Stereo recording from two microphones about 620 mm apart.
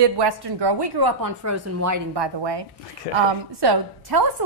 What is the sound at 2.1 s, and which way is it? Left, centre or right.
Speech, right.